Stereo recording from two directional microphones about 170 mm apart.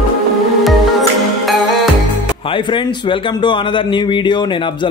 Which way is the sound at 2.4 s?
30° left (ahead or behind).